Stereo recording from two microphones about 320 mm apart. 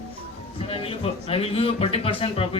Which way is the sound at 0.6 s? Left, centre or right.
Centre.